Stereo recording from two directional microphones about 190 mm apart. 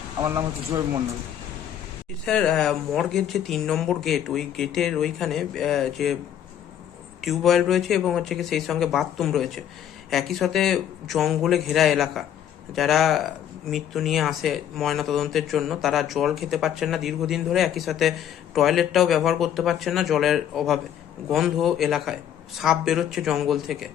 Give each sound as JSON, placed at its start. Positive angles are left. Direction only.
{"t": 0.2, "sound": "speech", "side_deg": -15}
{"t": 2.2, "sound": "speech", "side_deg": 5}
{"t": 7.2, "sound": "speech", "side_deg": 0}